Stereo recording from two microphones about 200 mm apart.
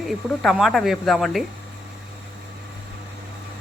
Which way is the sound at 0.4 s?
Centre (ahead or behind).